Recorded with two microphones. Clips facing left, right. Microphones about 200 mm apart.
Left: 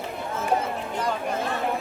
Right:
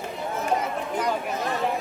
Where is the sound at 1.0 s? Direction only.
15° right (ahead or behind).